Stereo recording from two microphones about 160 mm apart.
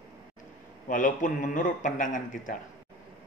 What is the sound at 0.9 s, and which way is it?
A man's voice, 55° left (ahead or behind).